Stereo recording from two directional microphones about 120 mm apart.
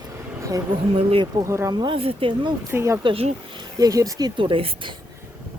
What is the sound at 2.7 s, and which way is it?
Speech, 25° right (ahead or behind).